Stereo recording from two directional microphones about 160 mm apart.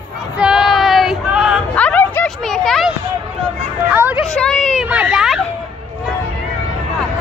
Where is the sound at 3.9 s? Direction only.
10° right (ahead or behind).